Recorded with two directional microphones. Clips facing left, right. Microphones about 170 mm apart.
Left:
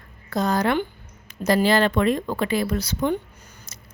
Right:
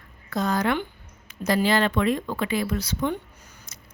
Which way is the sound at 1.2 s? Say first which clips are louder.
Left 3 dB; 35° left (ahead or behind).